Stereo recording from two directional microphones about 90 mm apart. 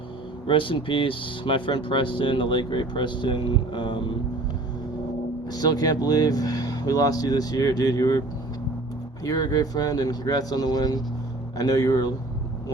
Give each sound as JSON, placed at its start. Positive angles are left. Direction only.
{"t": 0.4, "sound": "speech", "side_deg": 75}
{"t": 5.5, "sound": "speech", "side_deg": 50}
{"t": 9.2, "sound": "speech", "side_deg": 45}